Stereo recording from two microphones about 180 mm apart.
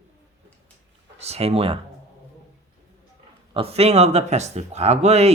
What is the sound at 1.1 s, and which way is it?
Speech, 35° right (ahead or behind).